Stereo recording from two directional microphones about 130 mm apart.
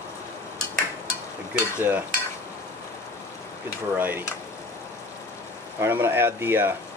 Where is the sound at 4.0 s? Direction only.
15° right (ahead or behind).